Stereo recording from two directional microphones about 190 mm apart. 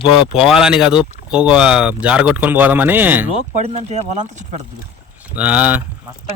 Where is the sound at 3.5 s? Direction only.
35° right (ahead or behind).